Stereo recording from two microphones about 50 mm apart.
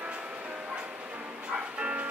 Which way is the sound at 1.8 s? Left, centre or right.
Right.